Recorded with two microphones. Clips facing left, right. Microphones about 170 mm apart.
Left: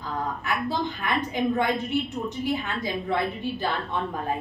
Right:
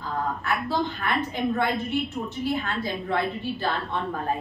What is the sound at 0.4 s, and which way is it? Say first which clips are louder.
A woman's voice: even; 15° left (ahead or behind).